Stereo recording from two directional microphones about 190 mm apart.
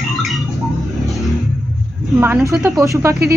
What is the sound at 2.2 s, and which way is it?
Speech, 10° right (ahead or behind).